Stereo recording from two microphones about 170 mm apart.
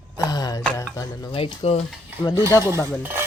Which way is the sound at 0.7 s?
15° left (ahead or behind).